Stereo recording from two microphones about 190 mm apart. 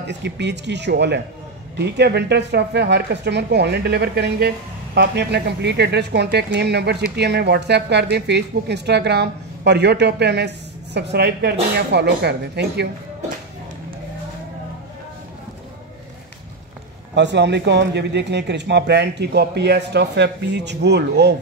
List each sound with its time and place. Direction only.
0.0 s a woman's voice: 65° right (ahead or behind)
17.1 s a woman's voice: 65° right (ahead or behind)